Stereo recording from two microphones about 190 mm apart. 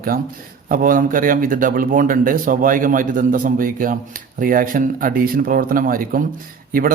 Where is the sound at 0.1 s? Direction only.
50° right (ahead or behind).